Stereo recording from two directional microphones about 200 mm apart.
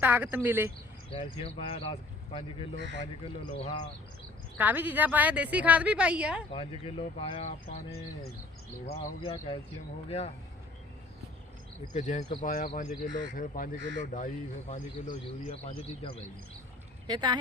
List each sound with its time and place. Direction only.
0.0 s a woman's voice: 10° right (ahead or behind)
1.1 s speech: 25° left (ahead or behind)
2.7 s speech: 60° right (ahead or behind)
3.6 s speech: 30° left (ahead or behind)
4.5 s a woman's voice: 10° right (ahead or behind)
6.5 s speech: 25° left (ahead or behind)
11.9 s speech: 35° left (ahead or behind)
17.1 s speech: 20° right (ahead or behind)